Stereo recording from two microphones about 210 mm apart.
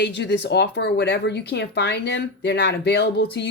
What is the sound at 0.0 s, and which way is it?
A woman's voice, 55° left (ahead or behind).